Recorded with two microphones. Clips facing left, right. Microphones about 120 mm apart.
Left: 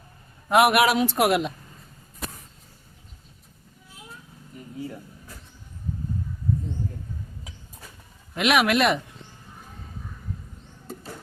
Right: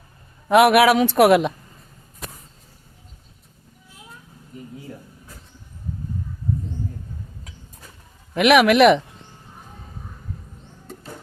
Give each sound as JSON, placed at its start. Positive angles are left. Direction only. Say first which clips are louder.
{"t": 0.4, "sound": "a man's voice", "louder": "right 5 dB", "side_deg": -90}
{"t": 8.4, "sound": "a man's voice", "louder": "right 7 dB", "side_deg": -75}